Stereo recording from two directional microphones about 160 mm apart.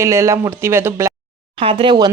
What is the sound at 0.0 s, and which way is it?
Speech, 20° right (ahead or behind).